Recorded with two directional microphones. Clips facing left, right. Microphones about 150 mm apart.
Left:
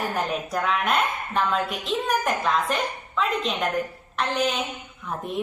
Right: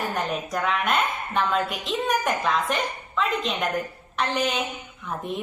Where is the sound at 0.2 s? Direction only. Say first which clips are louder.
Left 1 dB; centre (ahead or behind).